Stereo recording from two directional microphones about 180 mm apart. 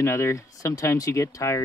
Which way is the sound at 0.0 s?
15° left (ahead or behind).